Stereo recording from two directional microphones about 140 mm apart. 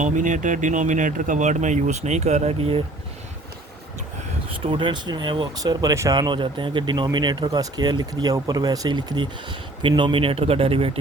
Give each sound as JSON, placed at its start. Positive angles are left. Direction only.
{"t": 0.0, "sound": "speech", "side_deg": -65}
{"t": 4.6, "sound": "speech", "side_deg": -35}